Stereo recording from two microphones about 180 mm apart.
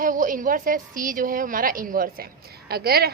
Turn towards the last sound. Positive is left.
turn(degrees=-60)  # may be behind; listen again after turning